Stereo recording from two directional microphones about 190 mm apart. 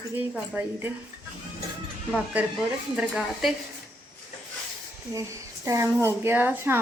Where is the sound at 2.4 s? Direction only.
10° right (ahead or behind).